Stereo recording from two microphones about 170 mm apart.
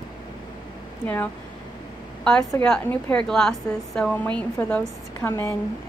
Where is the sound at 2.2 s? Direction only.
5° left (ahead or behind).